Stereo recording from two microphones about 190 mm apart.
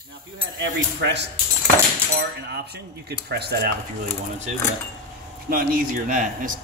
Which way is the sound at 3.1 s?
60° right (ahead or behind).